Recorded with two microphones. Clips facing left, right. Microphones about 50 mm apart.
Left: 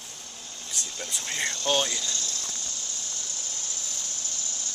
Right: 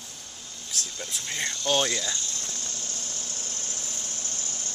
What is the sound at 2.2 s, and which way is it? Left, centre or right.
Speech, right.